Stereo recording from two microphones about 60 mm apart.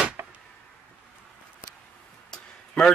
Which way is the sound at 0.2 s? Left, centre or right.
Right.